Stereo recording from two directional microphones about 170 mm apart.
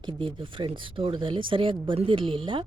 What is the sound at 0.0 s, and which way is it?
Speech, 30° right (ahead or behind).